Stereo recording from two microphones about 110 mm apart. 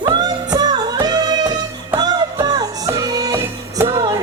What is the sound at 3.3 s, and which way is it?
Music, 20° right (ahead or behind).